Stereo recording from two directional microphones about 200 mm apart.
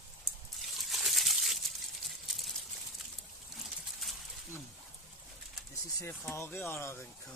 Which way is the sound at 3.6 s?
Centre (ahead or behind).